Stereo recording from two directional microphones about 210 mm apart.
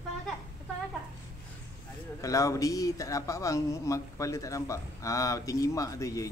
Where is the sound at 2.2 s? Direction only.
15° left (ahead or behind).